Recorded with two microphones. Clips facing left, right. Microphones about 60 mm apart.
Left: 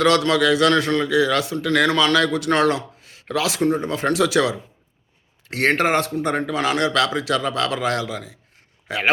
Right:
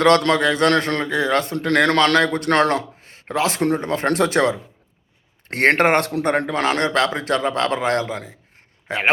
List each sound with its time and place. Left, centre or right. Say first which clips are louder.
0.0 s a man's voice: right 2 dB; right
3.7 s a man's voice: right 1 dB; right